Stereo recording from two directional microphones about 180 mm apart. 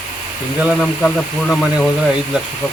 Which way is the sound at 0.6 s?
Centre (ahead or behind).